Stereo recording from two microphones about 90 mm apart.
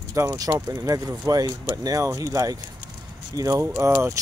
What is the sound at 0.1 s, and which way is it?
Speech, 35° right (ahead or behind).